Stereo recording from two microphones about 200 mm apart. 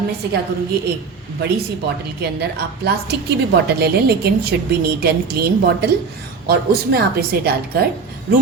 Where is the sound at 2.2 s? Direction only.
55° right (ahead or behind).